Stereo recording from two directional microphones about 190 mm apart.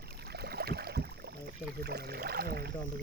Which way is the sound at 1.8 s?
60° right (ahead or behind).